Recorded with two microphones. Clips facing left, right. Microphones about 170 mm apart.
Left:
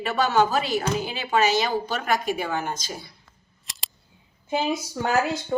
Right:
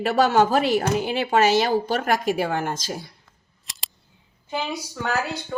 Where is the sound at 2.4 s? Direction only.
65° right (ahead or behind).